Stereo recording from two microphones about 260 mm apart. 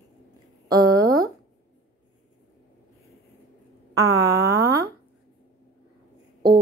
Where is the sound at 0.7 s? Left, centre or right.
Centre.